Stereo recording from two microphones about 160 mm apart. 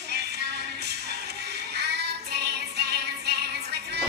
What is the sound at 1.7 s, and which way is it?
Music, 90° right.